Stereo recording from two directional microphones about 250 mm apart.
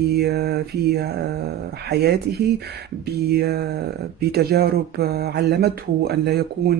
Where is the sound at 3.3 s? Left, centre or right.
Right.